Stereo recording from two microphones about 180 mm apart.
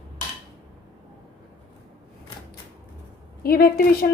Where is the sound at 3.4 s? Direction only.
55° left (ahead or behind).